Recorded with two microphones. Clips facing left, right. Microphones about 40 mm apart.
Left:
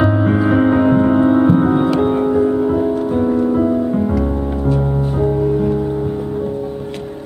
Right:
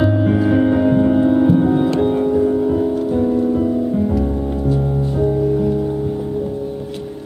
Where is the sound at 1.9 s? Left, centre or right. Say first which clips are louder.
Left 1 dB; centre.